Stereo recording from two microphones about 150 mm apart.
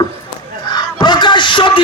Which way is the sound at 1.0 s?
30° left (ahead or behind).